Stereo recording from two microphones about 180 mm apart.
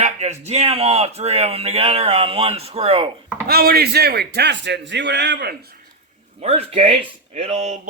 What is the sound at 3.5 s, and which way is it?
A man's voice, 60° right (ahead or behind).